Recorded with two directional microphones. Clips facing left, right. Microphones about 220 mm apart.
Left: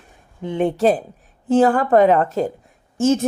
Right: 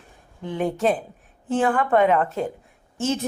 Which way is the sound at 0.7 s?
35° left (ahead or behind).